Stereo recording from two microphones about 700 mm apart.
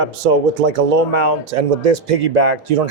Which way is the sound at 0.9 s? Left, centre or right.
Right.